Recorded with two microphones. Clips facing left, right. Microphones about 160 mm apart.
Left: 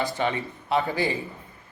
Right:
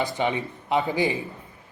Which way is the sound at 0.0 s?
20° right (ahead or behind).